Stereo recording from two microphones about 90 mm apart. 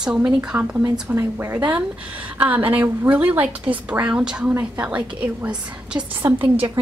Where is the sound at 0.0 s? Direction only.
10° right (ahead or behind).